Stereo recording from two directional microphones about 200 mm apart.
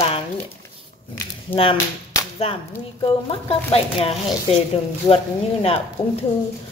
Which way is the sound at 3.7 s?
30° left (ahead or behind).